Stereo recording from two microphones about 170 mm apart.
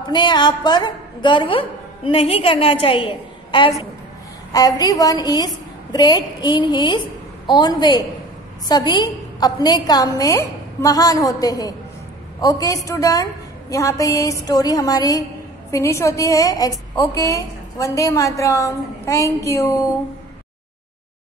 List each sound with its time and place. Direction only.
0.0 s a woman's voice: 25° left (ahead or behind)